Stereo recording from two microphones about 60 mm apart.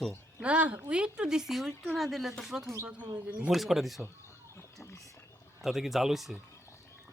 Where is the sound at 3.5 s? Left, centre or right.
Centre.